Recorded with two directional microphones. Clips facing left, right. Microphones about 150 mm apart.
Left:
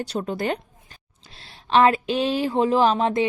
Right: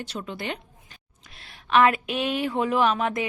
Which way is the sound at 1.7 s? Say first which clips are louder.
Left 3 dB; 30° left (ahead or behind).